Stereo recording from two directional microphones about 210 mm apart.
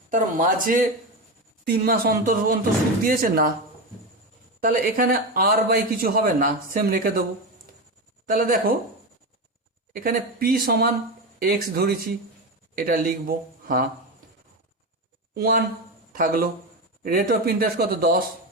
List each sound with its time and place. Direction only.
0.1 s speech: 40° right (ahead or behind)
4.6 s speech: 40° right (ahead or behind)
8.3 s speech: 40° right (ahead or behind)
9.9 s speech: 40° right (ahead or behind)
15.4 s speech: 45° right (ahead or behind)